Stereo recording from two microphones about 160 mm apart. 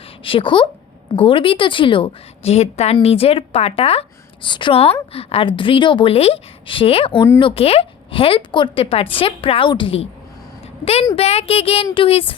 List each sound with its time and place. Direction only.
0.3 s a woman's voice: 30° left (ahead or behind)
11.1 s a woman's voice: 40° left (ahead or behind)